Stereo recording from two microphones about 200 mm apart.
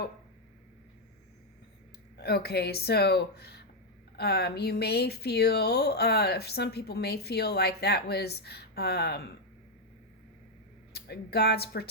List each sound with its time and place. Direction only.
2.1 s speech: 55° left (ahead or behind)
10.9 s speech: 55° left (ahead or behind)